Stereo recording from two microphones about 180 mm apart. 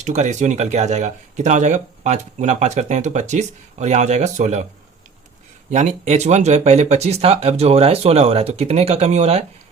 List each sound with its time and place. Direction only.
0.0 s speech: 40° right (ahead or behind)
5.7 s speech: 40° right (ahead or behind)